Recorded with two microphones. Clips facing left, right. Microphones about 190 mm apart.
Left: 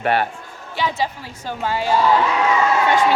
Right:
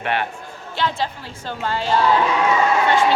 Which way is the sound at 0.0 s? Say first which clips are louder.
Left 4 dB; 40° left (ahead or behind).